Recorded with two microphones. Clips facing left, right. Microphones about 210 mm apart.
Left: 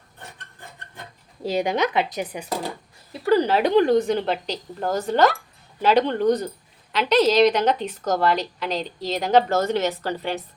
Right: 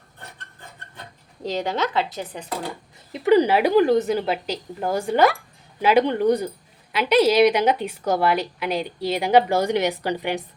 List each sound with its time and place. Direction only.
1.5 s speech: 15° left (ahead or behind)
3.1 s speech: 20° right (ahead or behind)